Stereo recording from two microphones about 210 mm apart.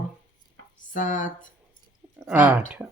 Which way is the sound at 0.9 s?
35° left (ahead or behind).